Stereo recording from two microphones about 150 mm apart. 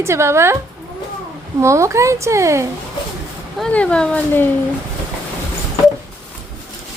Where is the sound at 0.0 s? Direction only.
20° right (ahead or behind).